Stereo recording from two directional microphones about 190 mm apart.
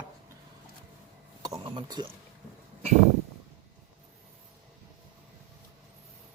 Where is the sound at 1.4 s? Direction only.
20° right (ahead or behind).